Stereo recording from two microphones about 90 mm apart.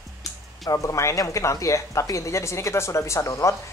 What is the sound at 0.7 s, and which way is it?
Speech, 35° left (ahead or behind).